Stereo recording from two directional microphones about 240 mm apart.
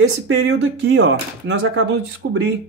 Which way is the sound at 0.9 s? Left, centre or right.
Right.